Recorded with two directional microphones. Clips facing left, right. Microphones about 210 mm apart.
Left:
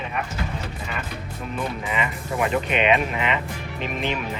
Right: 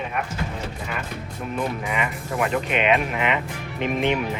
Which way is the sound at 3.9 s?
15° right (ahead or behind).